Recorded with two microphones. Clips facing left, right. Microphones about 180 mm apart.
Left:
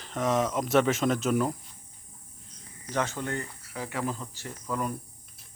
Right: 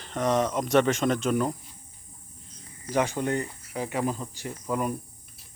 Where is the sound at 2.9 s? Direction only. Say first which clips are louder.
Right 5 dB; 15° right (ahead or behind).